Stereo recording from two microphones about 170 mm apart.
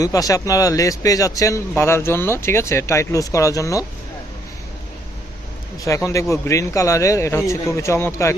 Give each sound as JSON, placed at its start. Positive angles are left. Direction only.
{"t": 0.0, "sound": "speech", "side_deg": 20}
{"t": 5.8, "sound": "speech", "side_deg": 15}